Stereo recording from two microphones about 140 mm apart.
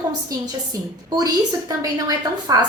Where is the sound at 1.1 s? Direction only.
30° right (ahead or behind).